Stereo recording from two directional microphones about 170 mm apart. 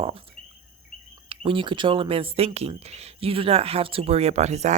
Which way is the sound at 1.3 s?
30° right (ahead or behind).